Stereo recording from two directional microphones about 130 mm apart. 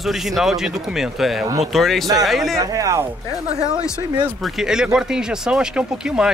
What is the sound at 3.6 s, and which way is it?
Speech, 5° right (ahead or behind).